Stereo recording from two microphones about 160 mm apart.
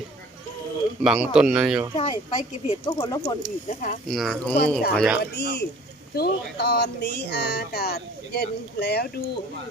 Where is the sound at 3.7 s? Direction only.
55° left (ahead or behind).